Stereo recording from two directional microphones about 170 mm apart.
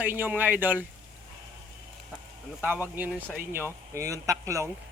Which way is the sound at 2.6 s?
10° right (ahead or behind).